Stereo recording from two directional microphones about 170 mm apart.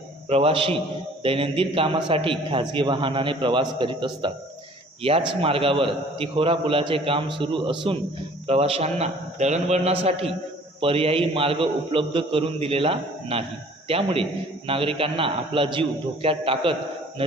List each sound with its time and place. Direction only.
0.3 s a man's voice: 35° right (ahead or behind)